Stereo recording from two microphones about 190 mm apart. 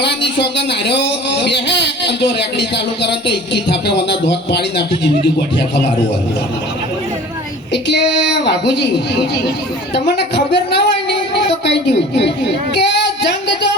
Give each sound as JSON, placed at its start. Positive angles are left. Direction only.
{"t": 0.3, "sound": "speech", "side_deg": 60}
{"t": 7.7, "sound": "a woman's voice", "side_deg": 65}
{"t": 11.6, "sound": "a sound", "side_deg": 60}